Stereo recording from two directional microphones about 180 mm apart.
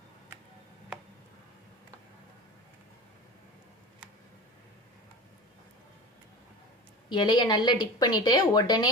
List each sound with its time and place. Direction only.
7.1 s a woman's voice: 25° left (ahead or behind)